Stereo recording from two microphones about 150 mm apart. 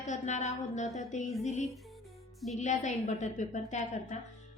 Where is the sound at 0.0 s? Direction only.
50° left (ahead or behind).